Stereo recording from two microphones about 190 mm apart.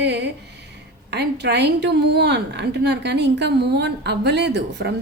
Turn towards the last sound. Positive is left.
turn(degrees=-65)  # may be behind; listen again after turning